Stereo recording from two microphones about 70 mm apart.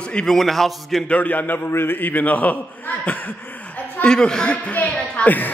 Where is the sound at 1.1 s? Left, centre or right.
Left.